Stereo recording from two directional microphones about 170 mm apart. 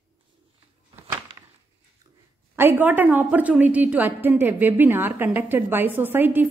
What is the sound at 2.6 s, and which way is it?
A woman's voice, 10° right (ahead or behind).